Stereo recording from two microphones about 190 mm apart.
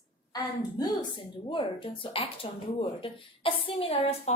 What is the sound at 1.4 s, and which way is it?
A woman's voice, 25° left (ahead or behind).